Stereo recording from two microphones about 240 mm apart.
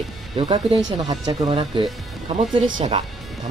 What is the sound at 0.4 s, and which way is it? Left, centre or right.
Speech, right.